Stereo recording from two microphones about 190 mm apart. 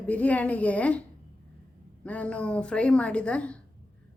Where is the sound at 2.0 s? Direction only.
5° left (ahead or behind).